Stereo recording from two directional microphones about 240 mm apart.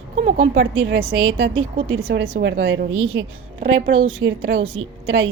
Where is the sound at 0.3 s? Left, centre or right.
Right.